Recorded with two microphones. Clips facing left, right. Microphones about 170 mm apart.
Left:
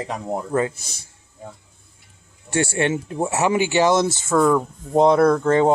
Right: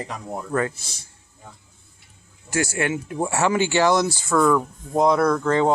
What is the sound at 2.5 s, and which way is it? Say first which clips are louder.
Speech: left 3 dB; 30° left (ahead or behind).